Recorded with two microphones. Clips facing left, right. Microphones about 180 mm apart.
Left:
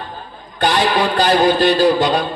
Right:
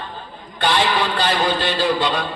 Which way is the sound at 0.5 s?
45° left (ahead or behind).